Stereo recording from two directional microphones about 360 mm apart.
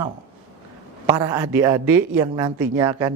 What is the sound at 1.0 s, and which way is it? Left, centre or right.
Speech, centre.